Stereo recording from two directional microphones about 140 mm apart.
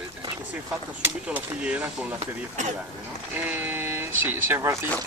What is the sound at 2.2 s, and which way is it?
Speech, 55° right (ahead or behind).